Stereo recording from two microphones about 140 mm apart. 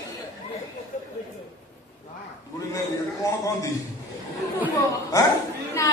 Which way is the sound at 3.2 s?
25° left (ahead or behind).